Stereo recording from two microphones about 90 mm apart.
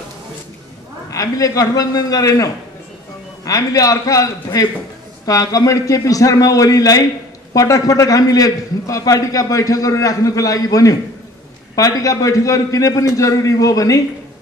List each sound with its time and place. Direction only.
1.1 s a man's voice: 40° left (ahead or behind)